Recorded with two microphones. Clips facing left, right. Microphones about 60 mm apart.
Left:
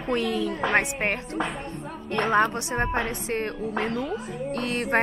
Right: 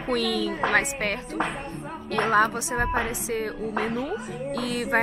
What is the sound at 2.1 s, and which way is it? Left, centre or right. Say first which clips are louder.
A woman's voice: right 1 dB; centre.